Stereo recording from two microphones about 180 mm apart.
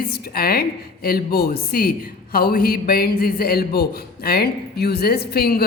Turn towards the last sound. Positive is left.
turn(degrees=60)  # may be behind; listen again after turning